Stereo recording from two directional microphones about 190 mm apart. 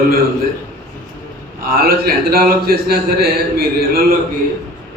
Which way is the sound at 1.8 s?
50° right (ahead or behind).